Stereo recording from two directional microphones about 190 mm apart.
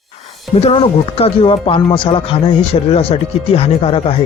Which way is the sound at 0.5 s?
30° left (ahead or behind).